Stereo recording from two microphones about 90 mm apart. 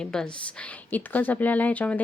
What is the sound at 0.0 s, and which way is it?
A woman's voice, 10° left (ahead or behind).